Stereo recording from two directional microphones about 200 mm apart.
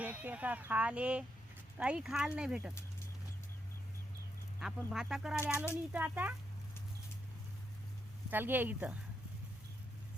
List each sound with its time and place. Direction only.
0.0 s speech: 10° right (ahead or behind)
4.9 s speech: 5° right (ahead or behind)
8.3 s speech: 10° right (ahead or behind)